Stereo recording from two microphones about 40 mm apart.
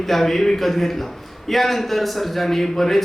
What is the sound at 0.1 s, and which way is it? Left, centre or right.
A man's voice, centre.